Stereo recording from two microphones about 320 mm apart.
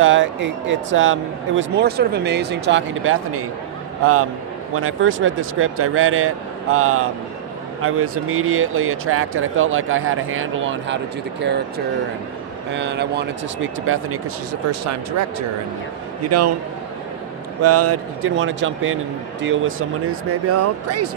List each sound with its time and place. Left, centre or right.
0.0 s speech: right
12.7 s speech: right
17.6 s speech: right